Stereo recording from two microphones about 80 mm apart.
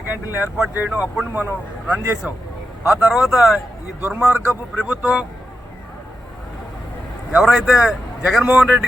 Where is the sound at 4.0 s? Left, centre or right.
Centre.